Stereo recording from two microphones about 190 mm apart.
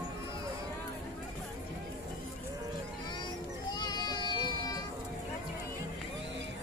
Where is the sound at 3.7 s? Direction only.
20° left (ahead or behind).